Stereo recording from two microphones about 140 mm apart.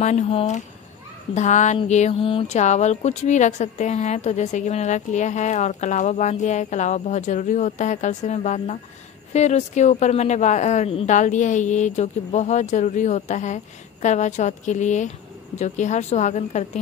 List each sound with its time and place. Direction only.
0.0 s speech: 50° left (ahead or behind)
11.1 s speech: 60° left (ahead or behind)